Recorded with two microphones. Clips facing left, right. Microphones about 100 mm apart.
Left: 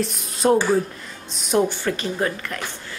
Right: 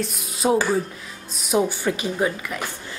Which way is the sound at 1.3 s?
5° right (ahead or behind).